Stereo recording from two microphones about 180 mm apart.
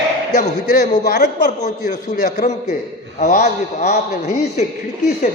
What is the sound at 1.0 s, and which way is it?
Speech, 65° left (ahead or behind).